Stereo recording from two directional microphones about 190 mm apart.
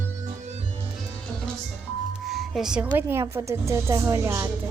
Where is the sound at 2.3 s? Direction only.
Centre (ahead or behind).